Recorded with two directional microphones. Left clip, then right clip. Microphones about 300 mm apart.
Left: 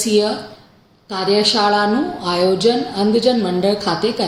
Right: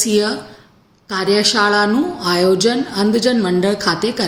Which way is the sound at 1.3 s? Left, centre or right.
Right.